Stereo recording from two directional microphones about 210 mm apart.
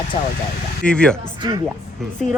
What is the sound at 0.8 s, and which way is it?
Speech, 5° left (ahead or behind).